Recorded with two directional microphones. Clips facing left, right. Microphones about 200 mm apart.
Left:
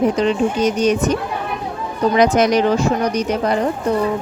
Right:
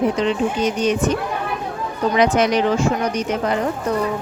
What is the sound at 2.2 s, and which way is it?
A woman's voice, 40° left (ahead or behind).